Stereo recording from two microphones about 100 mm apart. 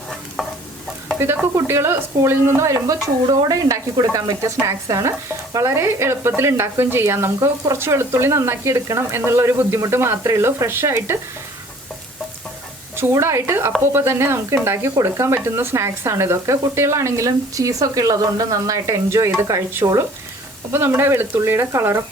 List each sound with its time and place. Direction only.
0.4 s stir: centre (ahead or behind)
1.2 s speech: 25° right (ahead or behind)
13.0 s speech: 25° right (ahead or behind)